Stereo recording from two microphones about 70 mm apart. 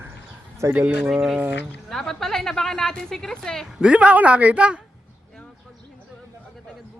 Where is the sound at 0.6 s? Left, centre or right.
Right.